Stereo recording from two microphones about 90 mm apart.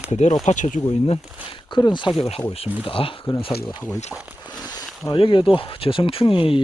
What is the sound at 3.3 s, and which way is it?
Speech, 60° left (ahead or behind).